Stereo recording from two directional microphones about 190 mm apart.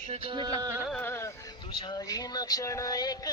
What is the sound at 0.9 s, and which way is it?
Music, 10° left (ahead or behind).